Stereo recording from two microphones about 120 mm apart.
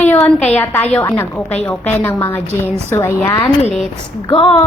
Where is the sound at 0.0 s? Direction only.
15° left (ahead or behind).